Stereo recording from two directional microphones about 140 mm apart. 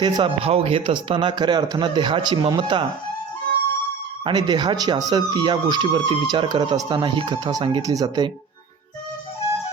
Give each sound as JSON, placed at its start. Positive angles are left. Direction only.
{"t": 0.0, "sound": "speech", "side_deg": -40}
{"t": 4.2, "sound": "speech", "side_deg": -35}